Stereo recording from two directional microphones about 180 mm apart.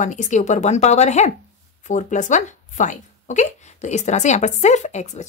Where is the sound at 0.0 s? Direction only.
45° left (ahead or behind).